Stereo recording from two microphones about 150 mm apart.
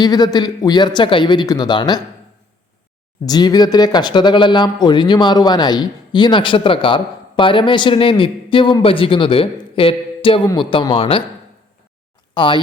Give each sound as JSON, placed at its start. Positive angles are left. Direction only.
{"t": 0.0, "sound": "speech", "side_deg": 25}
{"t": 3.2, "sound": "a man's voice", "side_deg": 25}
{"t": 12.3, "sound": "speech", "side_deg": 35}